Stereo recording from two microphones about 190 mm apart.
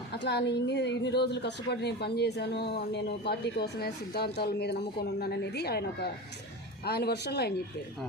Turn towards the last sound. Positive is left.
turn(degrees=60)  # may be behind; listen again after turning